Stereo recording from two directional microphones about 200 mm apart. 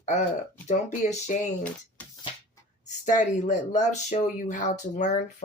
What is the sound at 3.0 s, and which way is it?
Speech, 40° left (ahead or behind).